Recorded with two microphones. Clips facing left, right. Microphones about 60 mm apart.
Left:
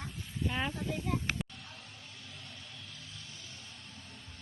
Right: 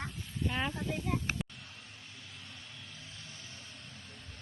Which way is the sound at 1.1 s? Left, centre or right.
Centre.